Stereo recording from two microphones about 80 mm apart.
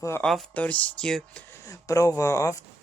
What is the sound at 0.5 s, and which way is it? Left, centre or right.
Speech, centre.